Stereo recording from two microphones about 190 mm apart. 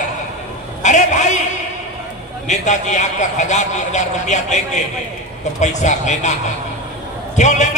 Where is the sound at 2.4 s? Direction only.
40° left (ahead or behind).